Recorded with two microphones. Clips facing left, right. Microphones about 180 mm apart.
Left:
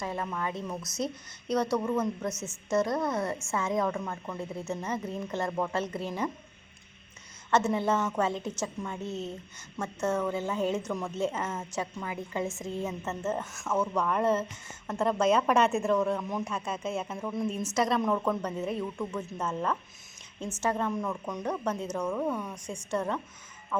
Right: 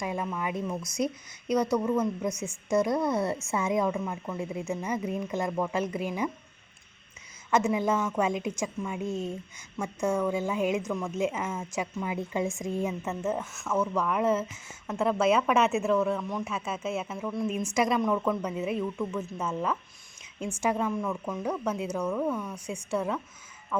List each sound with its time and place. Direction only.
0.0 s a woman's voice: 10° right (ahead or behind)
0.7 s speech: 5° left (ahead or behind)
1.7 s a woman's voice: 10° right (ahead or behind)
2.9 s speech: centre (ahead or behind)
3.3 s a woman's voice: 15° right (ahead or behind)
7.5 s a woman's voice: 10° right (ahead or behind)
22.0 s speech: 10° left (ahead or behind)
22.5 s a woman's voice: 10° right (ahead or behind)